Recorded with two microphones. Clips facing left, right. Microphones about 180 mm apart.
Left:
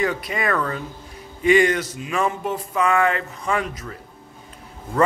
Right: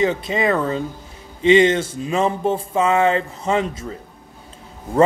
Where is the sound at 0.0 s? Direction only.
25° right (ahead or behind).